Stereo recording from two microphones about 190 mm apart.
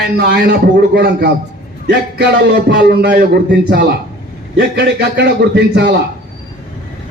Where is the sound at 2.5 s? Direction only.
60° right (ahead or behind).